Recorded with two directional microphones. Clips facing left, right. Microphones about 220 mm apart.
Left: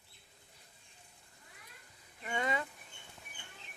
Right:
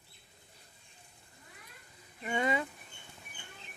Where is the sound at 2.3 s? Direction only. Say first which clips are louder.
Right 4 dB; 10° right (ahead or behind).